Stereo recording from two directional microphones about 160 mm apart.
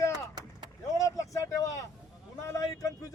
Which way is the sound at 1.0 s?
20° left (ahead or behind).